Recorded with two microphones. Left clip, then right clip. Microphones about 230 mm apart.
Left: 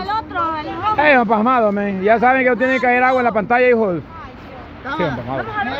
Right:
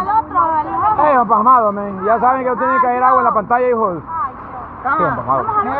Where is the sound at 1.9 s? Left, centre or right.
Left.